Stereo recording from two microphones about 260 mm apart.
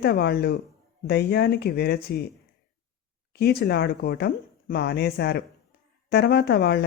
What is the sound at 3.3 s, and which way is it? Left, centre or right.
Speech, left.